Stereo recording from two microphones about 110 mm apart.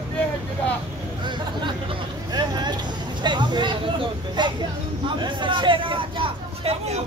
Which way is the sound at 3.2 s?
45° right (ahead or behind).